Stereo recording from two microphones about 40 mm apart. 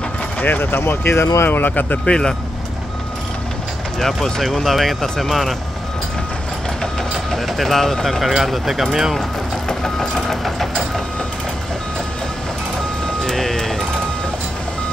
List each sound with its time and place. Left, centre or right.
0.4 s speech: left
1.6 s speech: left
2.0 s speech: centre
4.0 s speech: centre
5.3 s speech: centre
7.3 s speech: centre
8.2 s speech: centre
9.7 s engine: centre
13.0 s music: centre